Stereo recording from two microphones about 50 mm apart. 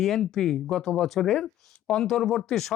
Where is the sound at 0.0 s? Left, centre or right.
Centre.